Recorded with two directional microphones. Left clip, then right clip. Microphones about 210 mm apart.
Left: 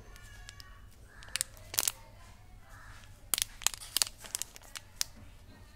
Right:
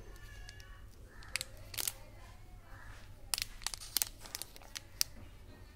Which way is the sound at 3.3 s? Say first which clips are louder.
Left 5 dB; 20° left (ahead or behind).